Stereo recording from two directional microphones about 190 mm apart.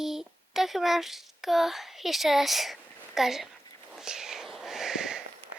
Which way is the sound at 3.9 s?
5° right (ahead or behind).